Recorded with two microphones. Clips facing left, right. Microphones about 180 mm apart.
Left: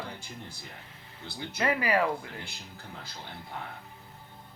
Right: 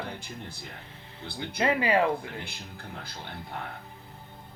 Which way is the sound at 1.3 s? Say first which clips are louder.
Right 3 dB; 25° right (ahead or behind).